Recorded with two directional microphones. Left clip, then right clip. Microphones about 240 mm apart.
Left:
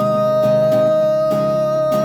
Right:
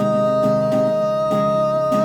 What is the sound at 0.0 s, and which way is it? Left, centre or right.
Music, left.